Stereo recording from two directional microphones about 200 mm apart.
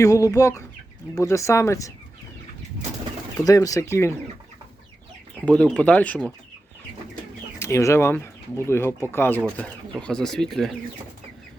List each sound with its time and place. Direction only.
0.0 s speech: 15° left (ahead or behind)
3.3 s speech: 15° left (ahead or behind)
5.5 s speech: 5° left (ahead or behind)
7.6 s speech: 15° left (ahead or behind)